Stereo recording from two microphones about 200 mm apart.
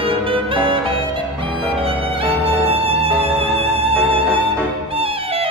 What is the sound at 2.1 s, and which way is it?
Music, 30° right (ahead or behind).